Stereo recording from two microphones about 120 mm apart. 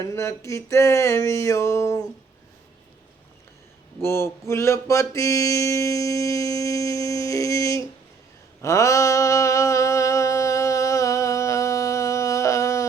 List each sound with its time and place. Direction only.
0.0 s mantra: 25° left (ahead or behind)
4.0 s mantra: 20° left (ahead or behind)
8.6 s a sound: 25° left (ahead or behind)